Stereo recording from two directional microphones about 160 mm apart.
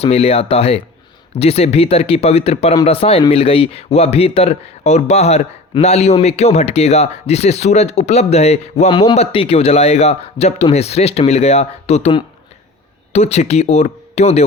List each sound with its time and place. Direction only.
0.0 s speech: 40° left (ahead or behind)